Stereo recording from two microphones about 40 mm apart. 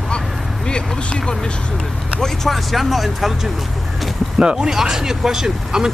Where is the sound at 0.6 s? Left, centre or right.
Left.